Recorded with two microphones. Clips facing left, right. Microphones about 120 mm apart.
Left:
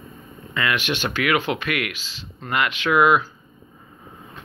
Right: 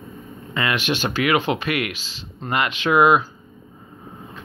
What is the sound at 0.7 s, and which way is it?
Speech, 40° right (ahead or behind).